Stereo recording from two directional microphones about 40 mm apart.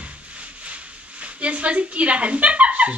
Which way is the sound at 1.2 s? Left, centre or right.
Right.